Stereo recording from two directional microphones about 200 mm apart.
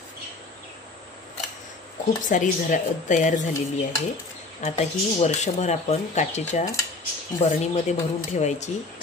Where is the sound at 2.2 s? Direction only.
40° left (ahead or behind).